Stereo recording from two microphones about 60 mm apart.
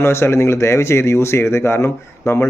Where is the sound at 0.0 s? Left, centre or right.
Left.